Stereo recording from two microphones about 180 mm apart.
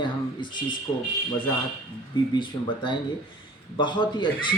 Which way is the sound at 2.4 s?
25° left (ahead or behind).